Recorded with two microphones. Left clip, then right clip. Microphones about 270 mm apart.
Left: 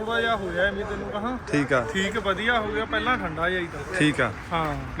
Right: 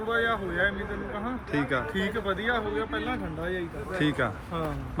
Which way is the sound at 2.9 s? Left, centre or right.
Centre.